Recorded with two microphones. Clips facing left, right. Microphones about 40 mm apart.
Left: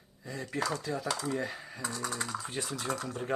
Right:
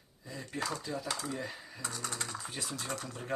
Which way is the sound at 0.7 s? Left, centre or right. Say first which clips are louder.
Left 4 dB; left.